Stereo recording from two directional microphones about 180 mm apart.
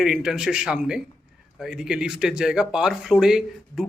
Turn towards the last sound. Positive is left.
turn(degrees=-5)  # may be behind; listen again after turning